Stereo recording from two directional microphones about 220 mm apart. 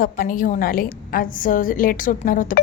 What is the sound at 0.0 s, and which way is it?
A woman's voice, 40° left (ahead or behind).